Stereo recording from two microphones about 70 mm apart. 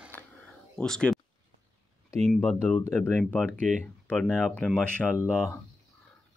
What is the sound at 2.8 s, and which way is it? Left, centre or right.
Speech, left.